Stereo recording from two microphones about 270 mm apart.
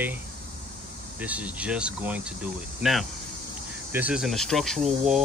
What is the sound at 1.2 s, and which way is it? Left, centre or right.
Speech, centre.